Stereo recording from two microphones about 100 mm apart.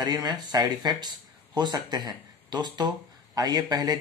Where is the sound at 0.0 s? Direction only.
45° right (ahead or behind).